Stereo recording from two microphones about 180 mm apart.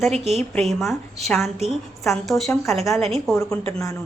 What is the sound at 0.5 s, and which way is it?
A woman's voice, centre (ahead or behind).